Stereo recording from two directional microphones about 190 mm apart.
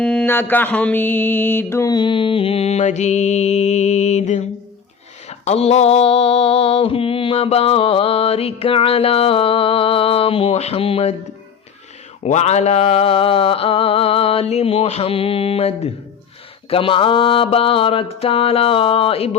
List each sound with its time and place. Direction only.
0.0 s mantra: 5° left (ahead or behind); by 11.1 s 30° left (ahead or behind)
12.2 s a sound: 35° left (ahead or behind)
16.6 s mantra: 30° left (ahead or behind)